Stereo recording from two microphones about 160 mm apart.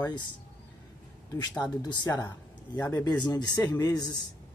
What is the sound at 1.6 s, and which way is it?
Speech, 25° left (ahead or behind).